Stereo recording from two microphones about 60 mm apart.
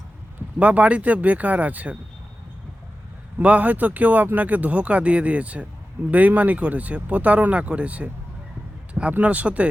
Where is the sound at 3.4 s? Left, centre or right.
Right.